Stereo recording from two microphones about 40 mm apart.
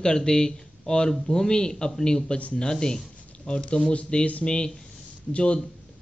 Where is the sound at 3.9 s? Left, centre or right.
Left.